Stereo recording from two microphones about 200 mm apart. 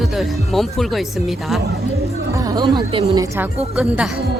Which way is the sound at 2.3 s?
20° right (ahead or behind).